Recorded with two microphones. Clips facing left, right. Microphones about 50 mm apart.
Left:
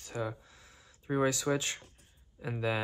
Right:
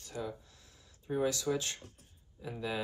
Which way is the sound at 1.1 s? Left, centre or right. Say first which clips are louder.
Left 3 dB; left.